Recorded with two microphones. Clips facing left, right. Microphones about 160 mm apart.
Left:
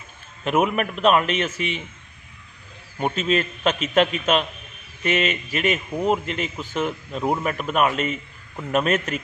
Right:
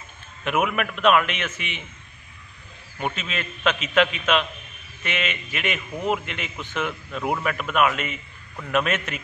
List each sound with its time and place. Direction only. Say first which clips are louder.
0.4 s a man's voice: left 3 dB; 35° left (ahead or behind)
3.0 s a man's voice: left 7 dB; 40° left (ahead or behind)